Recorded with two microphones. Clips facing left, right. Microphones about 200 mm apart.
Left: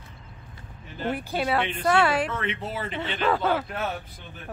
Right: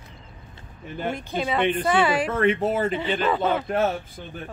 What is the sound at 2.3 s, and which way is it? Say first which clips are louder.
Speech: right 9 dB; 50° right (ahead or behind).